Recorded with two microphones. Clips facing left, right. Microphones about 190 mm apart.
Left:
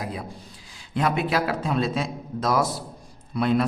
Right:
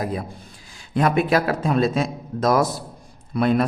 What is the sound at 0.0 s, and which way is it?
A man's voice, 50° right (ahead or behind).